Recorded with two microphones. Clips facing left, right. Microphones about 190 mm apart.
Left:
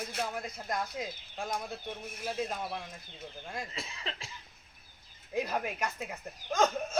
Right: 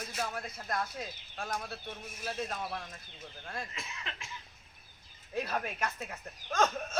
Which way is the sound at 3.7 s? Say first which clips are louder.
Left 3 dB; 35° left (ahead or behind).